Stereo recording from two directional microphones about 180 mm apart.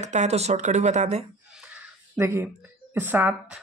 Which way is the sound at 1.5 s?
5° right (ahead or behind).